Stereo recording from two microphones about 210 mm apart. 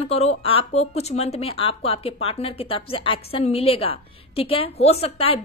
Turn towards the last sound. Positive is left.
turn(degrees=30)  # may be behind; listen again after turning